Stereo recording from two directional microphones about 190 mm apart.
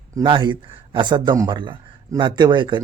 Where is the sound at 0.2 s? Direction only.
25° right (ahead or behind).